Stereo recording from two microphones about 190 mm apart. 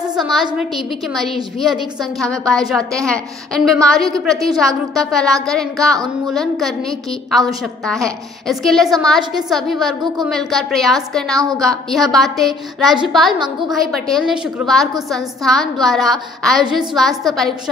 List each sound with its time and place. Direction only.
0.2 s a woman's voice: centre (ahead or behind)
11.3 s a woman's voice: 20° right (ahead or behind)
11.6 s a woman's voice: centre (ahead or behind)